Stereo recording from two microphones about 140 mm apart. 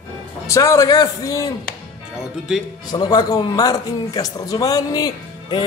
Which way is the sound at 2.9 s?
25° left (ahead or behind).